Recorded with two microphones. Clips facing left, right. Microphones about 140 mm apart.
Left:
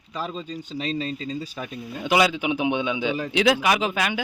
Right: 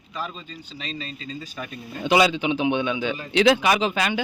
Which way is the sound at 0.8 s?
50° left (ahead or behind).